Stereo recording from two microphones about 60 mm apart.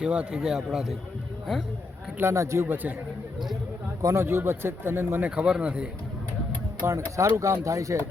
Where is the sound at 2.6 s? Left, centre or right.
Right.